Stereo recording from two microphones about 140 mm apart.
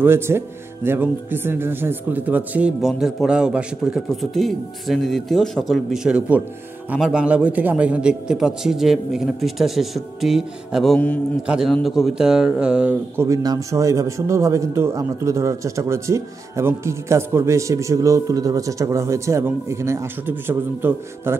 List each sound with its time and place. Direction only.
0.0 s a man's voice: 15° right (ahead or behind)